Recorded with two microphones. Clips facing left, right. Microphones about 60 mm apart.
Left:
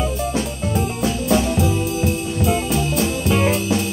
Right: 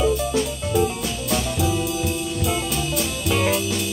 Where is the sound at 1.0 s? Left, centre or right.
Left.